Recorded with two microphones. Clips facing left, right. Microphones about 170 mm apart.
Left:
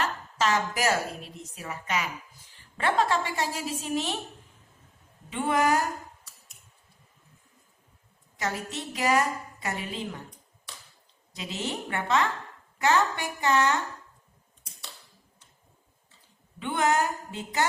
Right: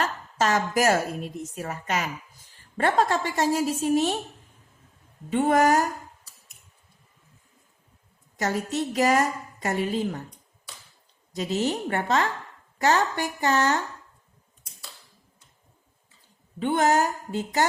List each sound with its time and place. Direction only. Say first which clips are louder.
0.0 s a woman's voice: right 2 dB; 45° right (ahead or behind)
5.3 s a woman's voice: right 5 dB; 40° right (ahead or behind)
8.4 s a woman's voice: right 6 dB; 45° right (ahead or behind)
11.3 s a woman's voice: right 8 dB; 40° right (ahead or behind)
16.6 s a woman's voice: right 4 dB; 40° right (ahead or behind)